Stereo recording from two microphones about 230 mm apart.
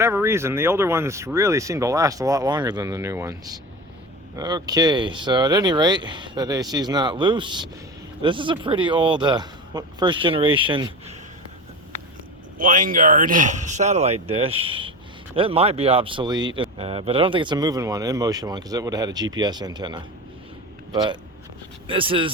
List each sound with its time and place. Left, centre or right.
0.0 s speech: centre
12.5 s speech: right